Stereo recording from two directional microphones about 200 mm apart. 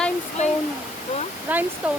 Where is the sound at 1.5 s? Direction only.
10° right (ahead or behind).